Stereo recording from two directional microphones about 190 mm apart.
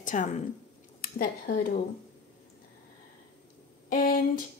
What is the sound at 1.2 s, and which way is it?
Speech, 50° left (ahead or behind).